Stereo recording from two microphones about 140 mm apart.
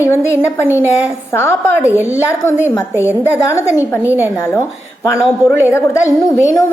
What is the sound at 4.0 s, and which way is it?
Speech, 15° right (ahead or behind).